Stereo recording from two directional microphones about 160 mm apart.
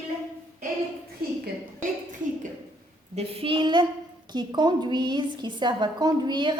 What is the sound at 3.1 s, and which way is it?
A woman's voice, 35° right (ahead or behind).